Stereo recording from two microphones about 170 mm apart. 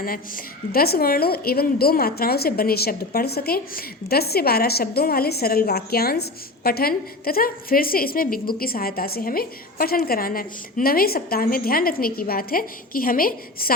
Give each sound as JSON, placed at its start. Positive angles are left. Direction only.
{"t": 0.0, "sound": "a woman's voice", "side_deg": 60}